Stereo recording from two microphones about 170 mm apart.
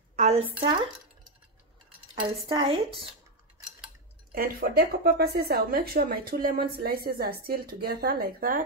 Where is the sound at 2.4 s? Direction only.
35° right (ahead or behind).